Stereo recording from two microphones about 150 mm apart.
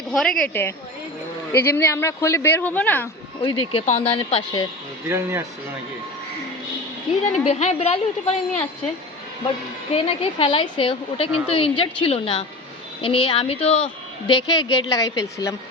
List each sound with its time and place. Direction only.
0.1 s a woman's voice: 5° left (ahead or behind)
3.4 s a woman's voice: 40° left (ahead or behind)
5.0 s speech: 15° right (ahead or behind)
7.3 s a woman's voice: 45° left (ahead or behind)
9.9 s a woman's voice: 40° left (ahead or behind); by 15.5 s 25° left (ahead or behind)